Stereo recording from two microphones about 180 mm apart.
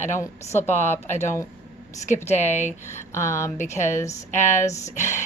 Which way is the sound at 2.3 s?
40° left (ahead or behind).